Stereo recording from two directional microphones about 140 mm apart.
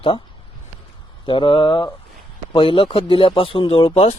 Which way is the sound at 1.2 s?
35° left (ahead or behind).